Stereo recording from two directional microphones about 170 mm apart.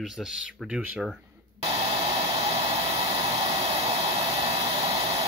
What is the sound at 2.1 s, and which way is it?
Hair dryer, 35° right (ahead or behind).